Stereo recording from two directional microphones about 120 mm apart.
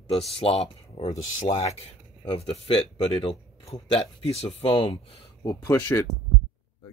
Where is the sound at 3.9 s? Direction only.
55° left (ahead or behind).